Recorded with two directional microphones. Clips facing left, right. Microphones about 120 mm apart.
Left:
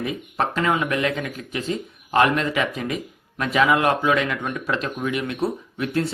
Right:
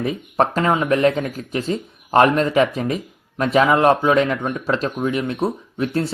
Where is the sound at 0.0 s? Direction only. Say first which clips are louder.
Right 5 dB; 35° right (ahead or behind).